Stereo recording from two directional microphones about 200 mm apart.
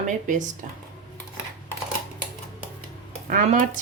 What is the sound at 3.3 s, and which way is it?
Speech, 40° right (ahead or behind).